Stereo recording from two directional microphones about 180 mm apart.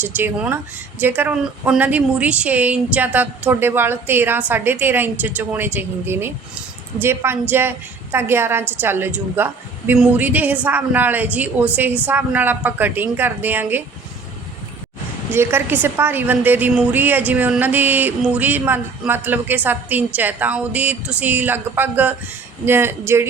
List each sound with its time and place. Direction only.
0.0 s a woman's voice: 10° right (ahead or behind)
15.3 s a woman's voice: 15° right (ahead or behind)